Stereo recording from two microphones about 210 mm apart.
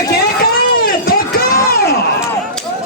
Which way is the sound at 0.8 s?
45° left (ahead or behind).